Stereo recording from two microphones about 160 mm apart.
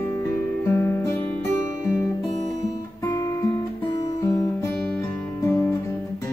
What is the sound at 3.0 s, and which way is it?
Music, 20° left (ahead or behind).